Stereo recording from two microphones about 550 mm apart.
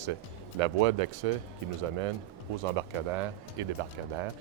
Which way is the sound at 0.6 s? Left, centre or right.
Right.